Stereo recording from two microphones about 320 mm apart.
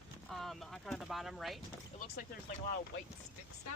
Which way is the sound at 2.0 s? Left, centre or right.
Left.